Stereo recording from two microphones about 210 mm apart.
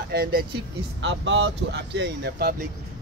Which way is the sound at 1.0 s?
60° right (ahead or behind).